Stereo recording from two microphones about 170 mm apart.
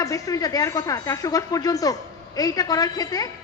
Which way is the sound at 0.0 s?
20° left (ahead or behind).